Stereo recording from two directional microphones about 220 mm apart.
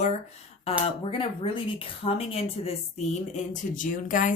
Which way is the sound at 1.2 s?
25° left (ahead or behind).